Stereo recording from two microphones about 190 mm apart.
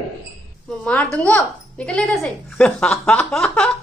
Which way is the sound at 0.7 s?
5° left (ahead or behind).